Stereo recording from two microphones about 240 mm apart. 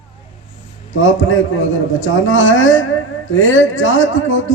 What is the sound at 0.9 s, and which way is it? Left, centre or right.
A man's voice, left.